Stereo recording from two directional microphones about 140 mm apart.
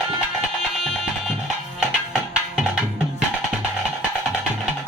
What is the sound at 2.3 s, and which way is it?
Music, 5° right (ahead or behind).